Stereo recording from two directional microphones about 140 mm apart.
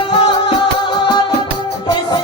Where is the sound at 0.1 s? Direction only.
35° left (ahead or behind).